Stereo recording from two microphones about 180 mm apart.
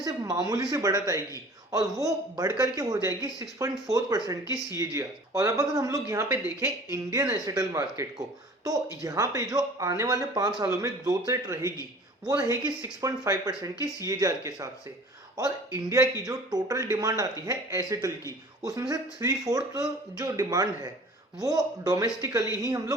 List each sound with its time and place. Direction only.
0.0 s speech: 20° right (ahead or behind)